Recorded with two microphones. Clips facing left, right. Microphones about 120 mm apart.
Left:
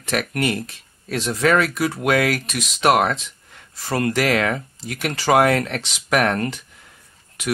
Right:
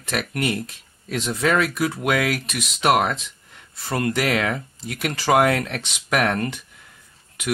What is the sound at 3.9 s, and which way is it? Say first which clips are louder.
Speech: left 2 dB; 70° left (ahead or behind).